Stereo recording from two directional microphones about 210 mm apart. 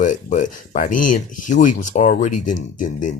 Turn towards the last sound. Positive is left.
turn(degrees=40)  # may be behind; listen again after turning